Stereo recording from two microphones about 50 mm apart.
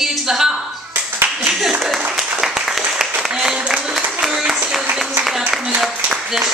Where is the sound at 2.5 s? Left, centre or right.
Centre.